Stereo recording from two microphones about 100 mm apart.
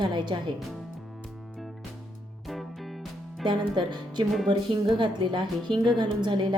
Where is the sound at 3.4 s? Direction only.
50° right (ahead or behind).